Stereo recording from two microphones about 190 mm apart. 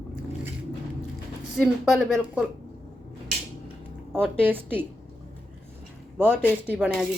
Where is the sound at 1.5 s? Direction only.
Centre (ahead or behind).